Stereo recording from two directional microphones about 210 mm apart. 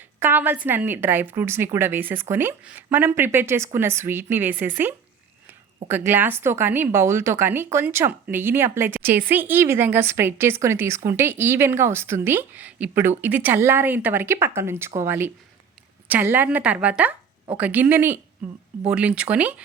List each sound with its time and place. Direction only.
0.2 s speech: 10° right (ahead or behind)